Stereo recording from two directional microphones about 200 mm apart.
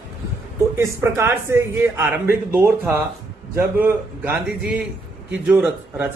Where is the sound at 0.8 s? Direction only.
10° right (ahead or behind).